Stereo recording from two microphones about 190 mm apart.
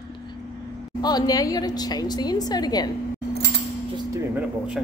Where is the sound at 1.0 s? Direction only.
20° left (ahead or behind).